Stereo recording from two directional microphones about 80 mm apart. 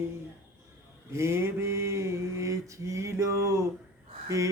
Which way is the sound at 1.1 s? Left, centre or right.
Right.